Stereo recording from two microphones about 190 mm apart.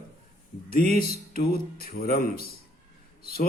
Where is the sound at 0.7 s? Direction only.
50° left (ahead or behind).